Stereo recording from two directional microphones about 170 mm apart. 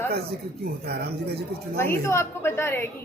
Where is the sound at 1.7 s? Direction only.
15° left (ahead or behind).